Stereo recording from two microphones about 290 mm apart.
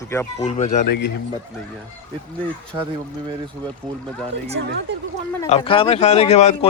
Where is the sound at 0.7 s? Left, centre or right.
Left.